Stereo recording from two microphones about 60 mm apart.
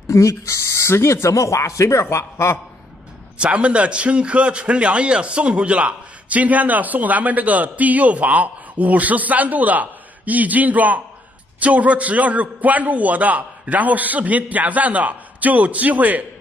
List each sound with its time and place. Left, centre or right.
0.1 s speech: left
3.3 s a man's voice: centre